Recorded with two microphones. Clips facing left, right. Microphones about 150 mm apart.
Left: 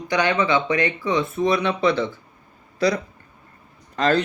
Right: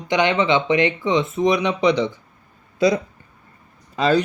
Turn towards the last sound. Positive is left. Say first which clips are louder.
# right 2 dB
turn(degrees=-10)  # may be behind; listen again after turning